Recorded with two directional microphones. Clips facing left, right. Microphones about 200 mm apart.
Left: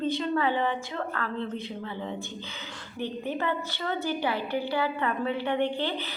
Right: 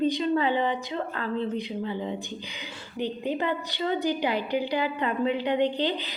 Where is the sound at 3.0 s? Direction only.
15° right (ahead or behind).